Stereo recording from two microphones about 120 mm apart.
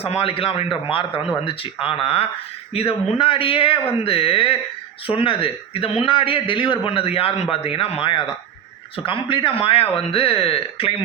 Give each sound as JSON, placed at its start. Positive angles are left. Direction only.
{"t": 0.0, "sound": "a man's voice", "side_deg": 50}